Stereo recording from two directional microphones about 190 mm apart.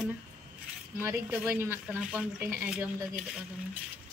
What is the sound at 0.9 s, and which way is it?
A woman's voice, 10° right (ahead or behind).